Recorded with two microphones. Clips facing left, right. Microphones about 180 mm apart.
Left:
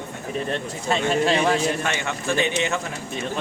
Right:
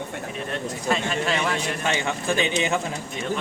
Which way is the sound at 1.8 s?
15° right (ahead or behind).